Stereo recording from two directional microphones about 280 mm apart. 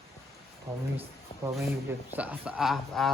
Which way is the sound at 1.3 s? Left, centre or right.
Centre.